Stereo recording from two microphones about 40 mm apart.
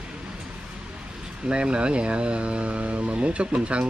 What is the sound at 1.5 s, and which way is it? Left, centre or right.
Speech, right.